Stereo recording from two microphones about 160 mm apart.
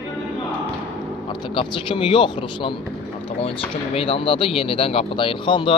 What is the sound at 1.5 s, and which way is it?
Speech, 30° left (ahead or behind).